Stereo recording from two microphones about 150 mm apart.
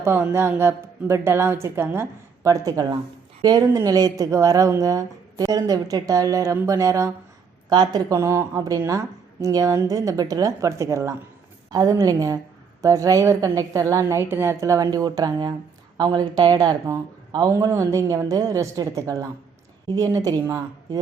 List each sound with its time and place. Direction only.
0.0 s a woman's voice: 15° right (ahead or behind)